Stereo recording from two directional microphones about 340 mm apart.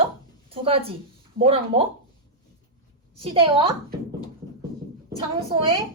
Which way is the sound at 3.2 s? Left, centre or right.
Centre.